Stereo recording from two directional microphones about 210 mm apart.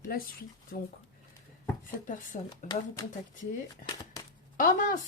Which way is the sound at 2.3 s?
35° left (ahead or behind).